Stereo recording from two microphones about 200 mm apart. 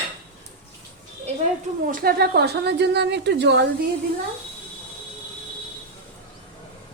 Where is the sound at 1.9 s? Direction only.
50° right (ahead or behind).